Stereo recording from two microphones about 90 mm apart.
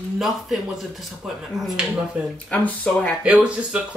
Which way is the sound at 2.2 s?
15° right (ahead or behind).